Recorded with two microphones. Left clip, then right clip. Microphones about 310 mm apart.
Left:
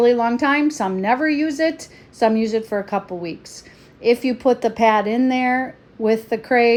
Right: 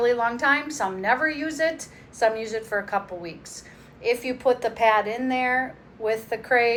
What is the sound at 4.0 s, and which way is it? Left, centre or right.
A woman's voice, left.